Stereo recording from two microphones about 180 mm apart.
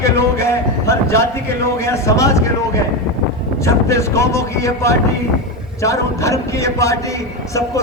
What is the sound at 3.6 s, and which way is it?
A man's voice, 15° left (ahead or behind).